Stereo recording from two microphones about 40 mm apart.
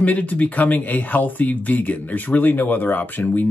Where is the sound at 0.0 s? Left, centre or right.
Left.